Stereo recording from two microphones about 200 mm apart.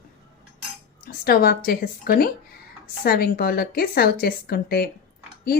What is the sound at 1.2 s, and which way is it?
A woman's voice, 50° left (ahead or behind).